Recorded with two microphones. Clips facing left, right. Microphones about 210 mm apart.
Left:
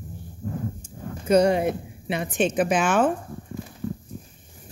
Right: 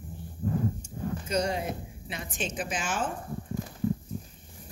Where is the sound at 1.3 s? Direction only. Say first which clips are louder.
Left 12 dB; 60° left (ahead or behind).